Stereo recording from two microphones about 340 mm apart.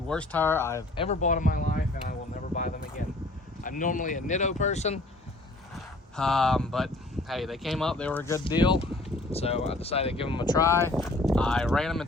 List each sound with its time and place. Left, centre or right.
0.1 s speech: centre; by 2.1 s left
3.6 s speech: left
5.7 s speech: centre